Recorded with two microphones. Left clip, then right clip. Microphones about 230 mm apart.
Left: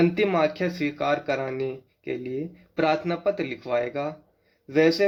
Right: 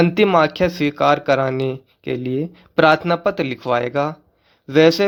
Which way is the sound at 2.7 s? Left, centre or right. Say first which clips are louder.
Right 10 dB; right.